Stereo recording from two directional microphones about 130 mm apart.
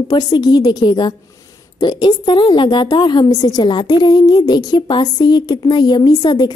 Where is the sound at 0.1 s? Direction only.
30° left (ahead or behind).